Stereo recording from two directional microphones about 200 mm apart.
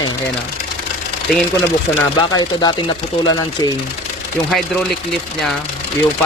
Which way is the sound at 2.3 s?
20° left (ahead or behind).